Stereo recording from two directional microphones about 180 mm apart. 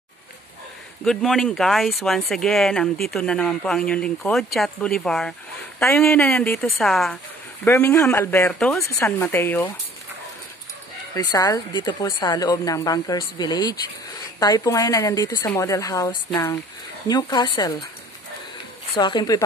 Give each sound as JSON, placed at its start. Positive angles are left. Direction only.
{"t": 1.0, "sound": "speech", "side_deg": 0}
{"t": 5.8, "sound": "a woman's voice", "side_deg": 15}
{"t": 7.6, "sound": "a woman's voice", "side_deg": 15}
{"t": 8.8, "sound": "a woman's voice", "side_deg": 15}
{"t": 11.1, "sound": "a woman's voice", "side_deg": 20}
{"t": 18.9, "sound": "a woman's voice", "side_deg": 25}